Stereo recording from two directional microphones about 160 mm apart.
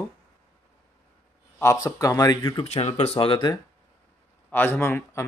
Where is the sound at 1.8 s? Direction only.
20° left (ahead or behind).